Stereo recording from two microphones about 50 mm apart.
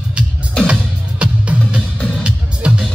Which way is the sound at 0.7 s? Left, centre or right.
Right.